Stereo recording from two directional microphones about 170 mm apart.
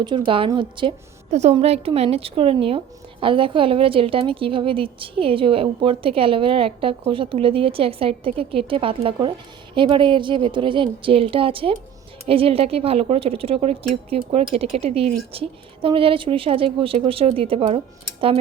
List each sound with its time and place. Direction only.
0.0 s a woman's voice: 30° right (ahead or behind)
1.3 s a woman's voice: 40° right (ahead or behind)